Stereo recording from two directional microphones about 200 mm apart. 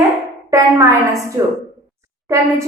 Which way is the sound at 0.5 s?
15° right (ahead or behind).